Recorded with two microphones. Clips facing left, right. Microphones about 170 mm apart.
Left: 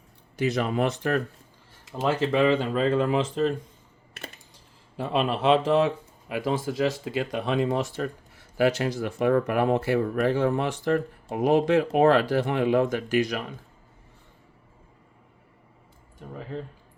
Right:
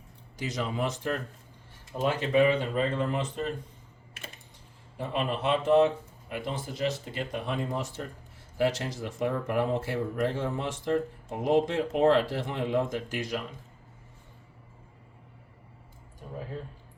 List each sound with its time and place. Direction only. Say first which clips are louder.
0.3 s speech: left 7 dB; 65° left (ahead or behind)
1.8 s speech: left 4 dB; 90° left
4.9 s speech: left 5 dB; 90° left